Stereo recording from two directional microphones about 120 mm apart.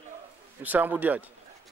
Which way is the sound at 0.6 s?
15° right (ahead or behind).